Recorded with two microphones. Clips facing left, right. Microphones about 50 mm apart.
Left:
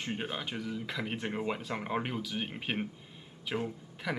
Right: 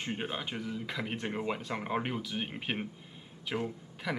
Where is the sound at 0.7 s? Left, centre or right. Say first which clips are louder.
Even; centre.